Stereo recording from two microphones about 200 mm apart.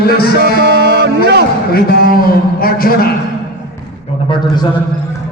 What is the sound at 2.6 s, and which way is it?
Speech, 50° left (ahead or behind).